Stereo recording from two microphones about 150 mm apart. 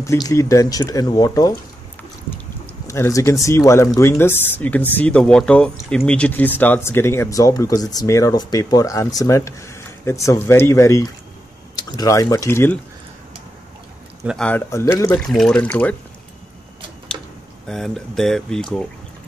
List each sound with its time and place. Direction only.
0.0 s speech: 20° left (ahead or behind)
2.9 s speech: 20° left (ahead or behind)
14.2 s speech: centre (ahead or behind)
14.5 s speech: 15° left (ahead or behind)
17.6 s speech: 5° left (ahead or behind)